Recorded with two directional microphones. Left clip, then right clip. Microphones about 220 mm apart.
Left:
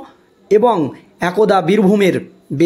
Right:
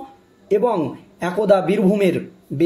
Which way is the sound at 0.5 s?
40° left (ahead or behind).